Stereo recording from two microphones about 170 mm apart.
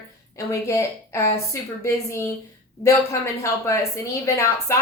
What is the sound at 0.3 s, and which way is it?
A woman's voice, 15° left (ahead or behind).